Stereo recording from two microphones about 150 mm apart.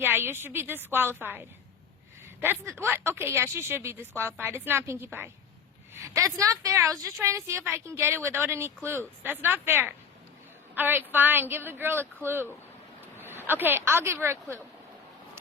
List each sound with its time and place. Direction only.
0.0 s a woman's voice: 15° right (ahead or behind)
2.4 s a woman's voice: 15° right (ahead or behind)
13.5 s a woman's voice: 15° right (ahead or behind)